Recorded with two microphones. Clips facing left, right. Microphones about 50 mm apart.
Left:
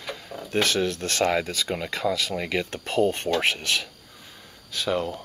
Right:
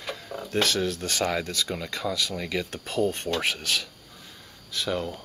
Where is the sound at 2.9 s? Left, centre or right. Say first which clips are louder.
Left 3 dB; left.